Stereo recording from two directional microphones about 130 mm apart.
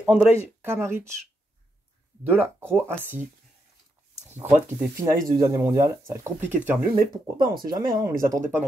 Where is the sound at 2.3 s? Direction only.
15° right (ahead or behind).